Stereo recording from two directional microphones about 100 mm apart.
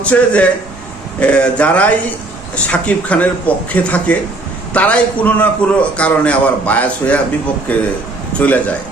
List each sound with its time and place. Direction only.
0.0 s a man's voice: 15° left (ahead or behind)